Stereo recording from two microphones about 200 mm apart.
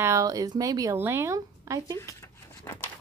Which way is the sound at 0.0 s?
15° right (ahead or behind).